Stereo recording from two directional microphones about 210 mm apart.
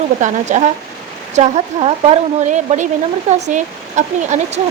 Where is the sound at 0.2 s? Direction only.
35° right (ahead or behind).